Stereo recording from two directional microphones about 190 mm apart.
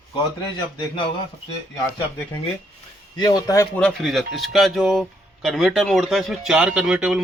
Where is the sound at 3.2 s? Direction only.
20° left (ahead or behind).